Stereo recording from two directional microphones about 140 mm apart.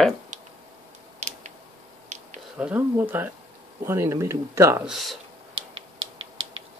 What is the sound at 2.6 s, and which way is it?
Speech, 10° right (ahead or behind).